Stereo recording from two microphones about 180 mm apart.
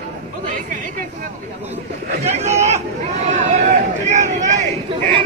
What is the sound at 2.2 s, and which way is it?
Chatter, 35° right (ahead or behind).